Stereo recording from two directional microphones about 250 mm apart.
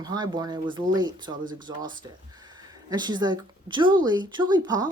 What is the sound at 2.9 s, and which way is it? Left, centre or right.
Speech, centre.